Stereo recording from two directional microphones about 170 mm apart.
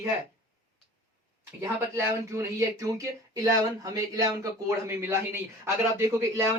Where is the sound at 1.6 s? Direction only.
15° right (ahead or behind).